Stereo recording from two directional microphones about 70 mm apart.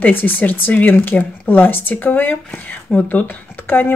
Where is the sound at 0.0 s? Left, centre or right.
Left.